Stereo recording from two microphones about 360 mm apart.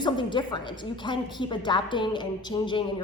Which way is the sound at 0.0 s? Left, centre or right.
Centre.